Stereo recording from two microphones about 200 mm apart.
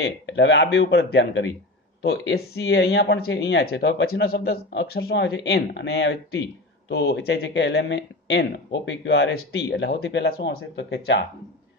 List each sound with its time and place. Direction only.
0.0 s speech: 60° left (ahead or behind)